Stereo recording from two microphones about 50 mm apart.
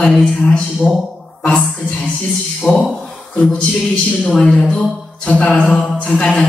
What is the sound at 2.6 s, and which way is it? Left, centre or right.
Speech, left.